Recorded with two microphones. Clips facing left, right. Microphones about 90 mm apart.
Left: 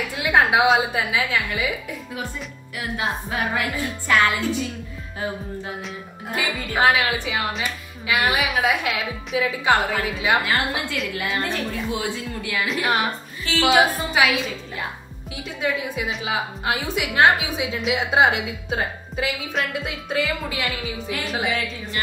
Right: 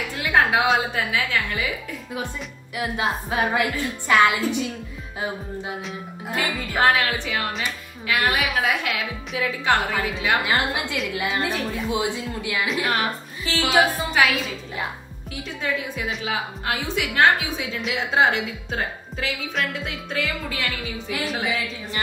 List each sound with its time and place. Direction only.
0.1 s music: 10° left (ahead or behind)
0.7 s a woman's voice: centre (ahead or behind)
1.1 s a woman's voice: 10° left (ahead or behind)
2.8 s music: 25° right (ahead or behind)
6.3 s a woman's voice: 5° left (ahead or behind)
10.4 s music: 20° right (ahead or behind)
11.4 s a woman's voice: 5° right (ahead or behind)
11.9 s music: 20° right (ahead or behind)
13.5 s a woman's voice: 5° left (ahead or behind)
15.6 s a woman's voice: 5° left (ahead or behind)
20.8 s a woman's voice: centre (ahead or behind)